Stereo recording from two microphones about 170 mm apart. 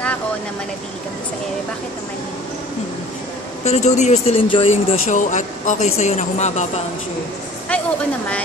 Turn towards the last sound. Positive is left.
turn(degrees=10)  # may be behind; listen again after turning